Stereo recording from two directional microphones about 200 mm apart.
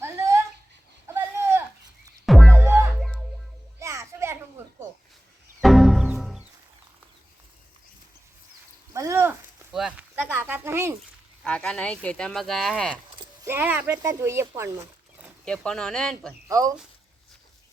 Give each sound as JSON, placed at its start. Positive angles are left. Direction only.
{"t": 0.0, "sound": "a sound", "side_deg": -15}
{"t": 2.2, "sound": "music", "side_deg": 0}
{"t": 2.6, "sound": "music", "side_deg": -15}
{"t": 3.0, "sound": "music", "side_deg": 0}
{"t": 3.8, "sound": "children playing", "side_deg": -15}
{"t": 5.5, "sound": "music", "side_deg": 0}
{"t": 8.9, "sound": "a sound", "side_deg": -15}
{"t": 11.4, "sound": "speech", "side_deg": 5}
{"t": 13.4, "sound": "speech", "side_deg": -10}
{"t": 15.4, "sound": "speech", "side_deg": 5}
{"t": 16.5, "sound": "speech", "side_deg": -15}